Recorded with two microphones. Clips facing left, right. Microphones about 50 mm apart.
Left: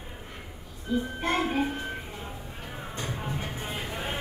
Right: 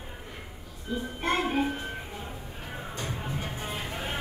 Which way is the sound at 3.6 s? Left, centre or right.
Centre.